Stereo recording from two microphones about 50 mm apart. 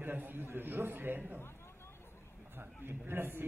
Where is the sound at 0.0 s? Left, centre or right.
Right.